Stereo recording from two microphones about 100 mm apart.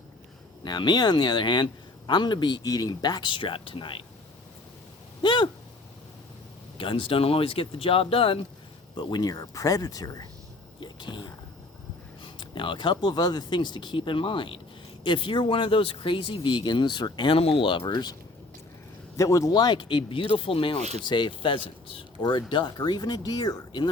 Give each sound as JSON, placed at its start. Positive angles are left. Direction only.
{"t": 0.6, "sound": "speech", "side_deg": 45}
{"t": 5.2, "sound": "a sound", "side_deg": 50}
{"t": 6.7, "sound": "speech", "side_deg": 60}
{"t": 9.0, "sound": "speech", "side_deg": 50}
{"t": 10.8, "sound": "a sound", "side_deg": 50}
{"t": 12.2, "sound": "speech", "side_deg": 55}
{"t": 19.1, "sound": "speech", "side_deg": 35}
{"t": 21.0, "sound": "speech", "side_deg": 50}